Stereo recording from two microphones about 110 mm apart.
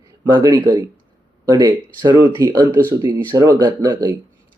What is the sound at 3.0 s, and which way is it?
Speech, 40° right (ahead or behind).